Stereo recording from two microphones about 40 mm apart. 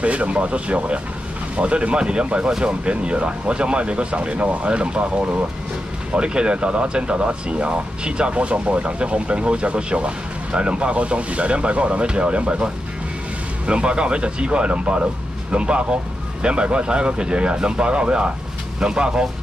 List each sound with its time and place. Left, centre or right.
0.0 s speech: right